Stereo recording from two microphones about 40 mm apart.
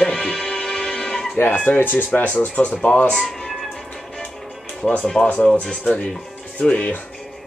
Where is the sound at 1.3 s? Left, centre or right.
Left.